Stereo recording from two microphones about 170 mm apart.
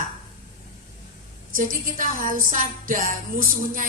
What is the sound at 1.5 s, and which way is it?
A woman's voice, 55° right (ahead or behind).